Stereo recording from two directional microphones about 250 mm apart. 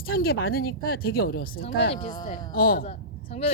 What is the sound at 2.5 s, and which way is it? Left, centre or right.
Speech, left.